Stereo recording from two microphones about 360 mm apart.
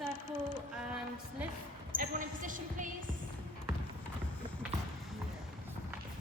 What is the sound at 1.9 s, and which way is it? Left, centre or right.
A woman's voice, right.